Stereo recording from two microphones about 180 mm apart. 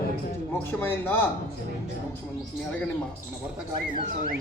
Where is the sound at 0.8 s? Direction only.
10° left (ahead or behind).